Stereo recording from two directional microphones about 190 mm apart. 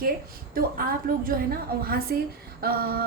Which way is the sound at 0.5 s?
50° right (ahead or behind).